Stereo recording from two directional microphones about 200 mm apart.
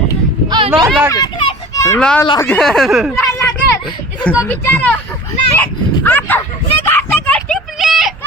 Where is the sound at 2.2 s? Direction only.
20° left (ahead or behind).